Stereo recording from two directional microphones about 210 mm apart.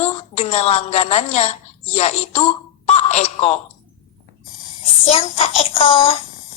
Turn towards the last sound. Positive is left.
turn(degrees=25)  # may be behind; listen again after turning